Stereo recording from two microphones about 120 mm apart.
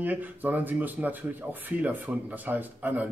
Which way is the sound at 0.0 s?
15° right (ahead or behind).